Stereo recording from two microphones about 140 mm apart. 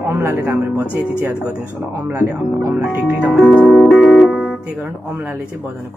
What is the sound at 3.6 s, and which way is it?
Music, centre (ahead or behind).